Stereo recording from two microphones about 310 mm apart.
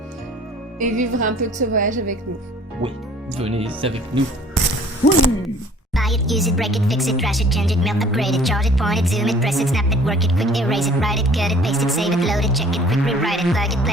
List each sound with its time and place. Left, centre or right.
0.8 s speech: right
3.4 s speech: centre
5.9 s speech: centre